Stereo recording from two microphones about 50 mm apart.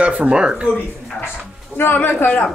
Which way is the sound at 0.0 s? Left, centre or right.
Right.